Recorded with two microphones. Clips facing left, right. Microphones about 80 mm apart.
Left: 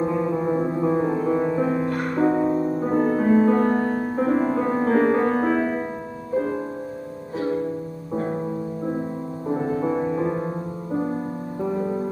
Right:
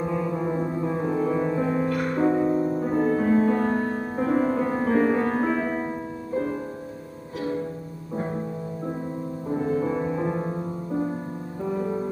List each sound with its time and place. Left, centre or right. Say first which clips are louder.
0.0 s music: left 4 dB; centre
2.4 s music: left 1 dB; centre
3.1 s music: left 3 dB; centre
5.3 s music: left 3 dB; centre
9.5 s music: left 2 dB; left; by 10.5 s centre